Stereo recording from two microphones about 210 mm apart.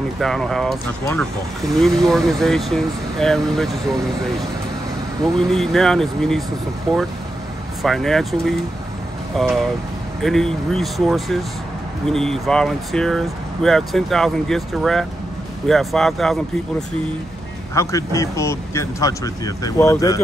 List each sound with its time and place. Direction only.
0.2 s speech: centre (ahead or behind)
1.8 s speech: centre (ahead or behind)
7.8 s speech: centre (ahead or behind)
17.7 s speech: 15° left (ahead or behind)